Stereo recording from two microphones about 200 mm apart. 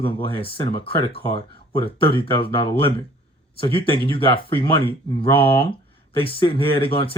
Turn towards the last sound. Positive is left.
turn(degrees=25)  # may be behind; listen again after turning